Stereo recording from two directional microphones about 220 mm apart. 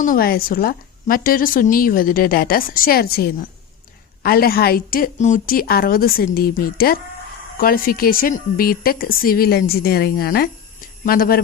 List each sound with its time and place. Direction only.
0.0 s a woman's voice: 40° left (ahead or behind)